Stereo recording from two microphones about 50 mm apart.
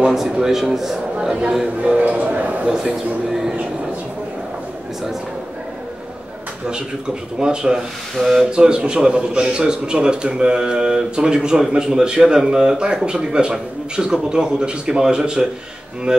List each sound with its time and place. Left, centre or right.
0.0 s a man's voice: centre
1.8 s speech: right
2.8 s a man's voice: centre
7.3 s a man's voice: centre
8.2 s speech: centre
8.5 s a man's voice: centre